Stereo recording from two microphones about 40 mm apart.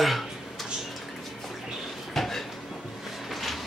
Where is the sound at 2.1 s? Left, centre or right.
Centre.